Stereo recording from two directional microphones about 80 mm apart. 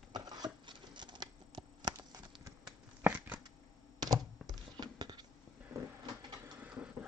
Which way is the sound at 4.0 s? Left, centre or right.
Right.